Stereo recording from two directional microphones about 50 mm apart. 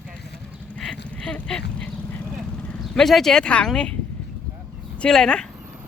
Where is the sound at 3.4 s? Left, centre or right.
Left.